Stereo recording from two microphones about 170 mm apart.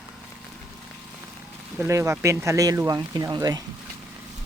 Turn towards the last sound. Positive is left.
turn(degrees=-25)  # may be behind; listen again after turning